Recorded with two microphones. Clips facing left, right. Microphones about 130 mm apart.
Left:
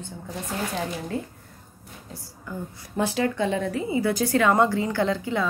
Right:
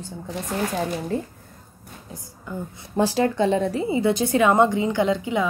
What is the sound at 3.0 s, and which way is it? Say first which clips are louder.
A woman's voice: right 4 dB; 35° right (ahead or behind).